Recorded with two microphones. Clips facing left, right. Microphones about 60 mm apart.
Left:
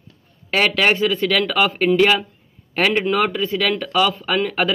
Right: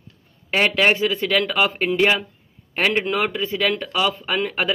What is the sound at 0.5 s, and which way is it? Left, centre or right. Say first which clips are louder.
Speech: left 1 dB; centre.